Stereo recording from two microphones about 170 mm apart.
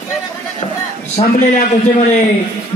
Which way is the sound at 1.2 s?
35° left (ahead or behind).